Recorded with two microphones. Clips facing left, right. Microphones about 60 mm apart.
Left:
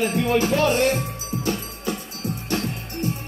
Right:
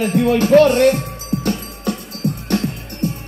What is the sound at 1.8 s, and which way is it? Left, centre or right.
Music, right.